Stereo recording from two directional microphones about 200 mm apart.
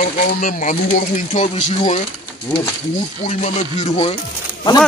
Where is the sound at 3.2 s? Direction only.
35° left (ahead or behind).